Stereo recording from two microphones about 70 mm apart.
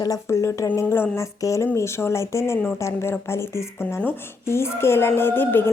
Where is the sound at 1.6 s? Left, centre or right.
Left.